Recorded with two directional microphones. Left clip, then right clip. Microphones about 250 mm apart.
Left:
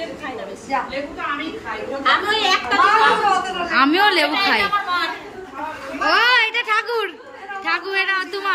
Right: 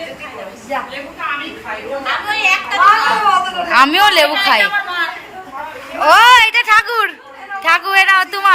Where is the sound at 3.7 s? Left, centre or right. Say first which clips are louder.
Right 6 dB; centre.